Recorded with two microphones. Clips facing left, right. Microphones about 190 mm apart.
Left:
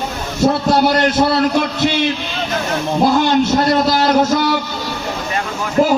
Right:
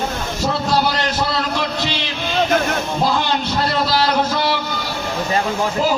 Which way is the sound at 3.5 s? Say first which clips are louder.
Left 5 dB; 45° left (ahead or behind).